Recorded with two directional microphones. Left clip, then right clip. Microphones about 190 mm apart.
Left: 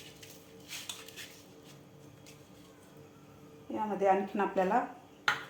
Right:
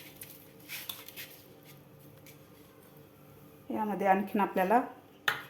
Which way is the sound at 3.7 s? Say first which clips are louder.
Right 1 dB; 50° right (ahead or behind).